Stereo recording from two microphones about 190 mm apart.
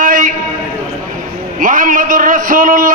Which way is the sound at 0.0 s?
45° right (ahead or behind).